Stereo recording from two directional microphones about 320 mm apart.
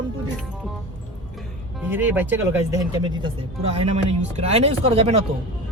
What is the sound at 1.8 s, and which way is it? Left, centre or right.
A man's voice, centre.